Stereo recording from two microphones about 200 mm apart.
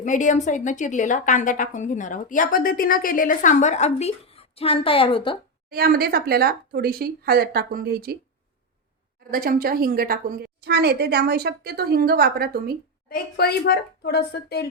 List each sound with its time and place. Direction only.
0.0 s a woman's voice: 40° left (ahead or behind)
5.7 s a woman's voice: 50° right (ahead or behind)
9.3 s a woman's voice: 45° right (ahead or behind)
13.1 s a woman's voice: 50° left (ahead or behind)